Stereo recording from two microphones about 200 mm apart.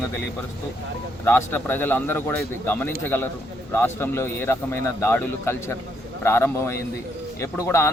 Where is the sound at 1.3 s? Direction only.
10° left (ahead or behind).